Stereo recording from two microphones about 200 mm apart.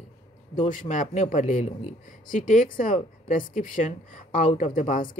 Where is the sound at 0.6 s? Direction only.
40° left (ahead or behind).